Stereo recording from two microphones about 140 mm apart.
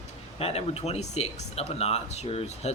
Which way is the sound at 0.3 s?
45° left (ahead or behind).